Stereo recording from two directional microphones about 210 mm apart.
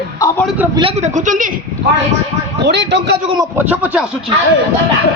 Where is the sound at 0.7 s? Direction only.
30° right (ahead or behind).